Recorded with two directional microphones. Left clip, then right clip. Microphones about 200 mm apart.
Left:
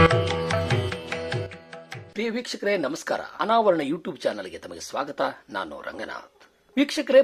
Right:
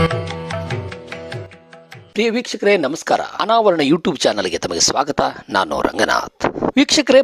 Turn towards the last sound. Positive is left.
turn(degrees=-50)  # may be behind; listen again after turning